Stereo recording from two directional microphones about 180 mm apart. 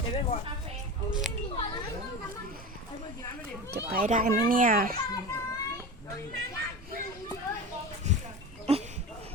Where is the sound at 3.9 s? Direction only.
50° right (ahead or behind).